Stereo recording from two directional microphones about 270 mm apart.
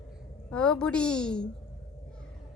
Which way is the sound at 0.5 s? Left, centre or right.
Centre.